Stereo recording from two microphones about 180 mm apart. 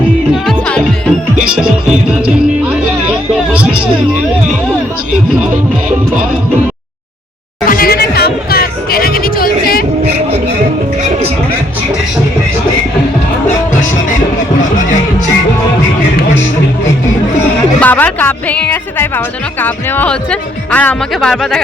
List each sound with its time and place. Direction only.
0.4 s music: 5° left (ahead or behind)
7.7 s music: 55° left (ahead or behind)
17.7 s a woman's voice: 10° left (ahead or behind)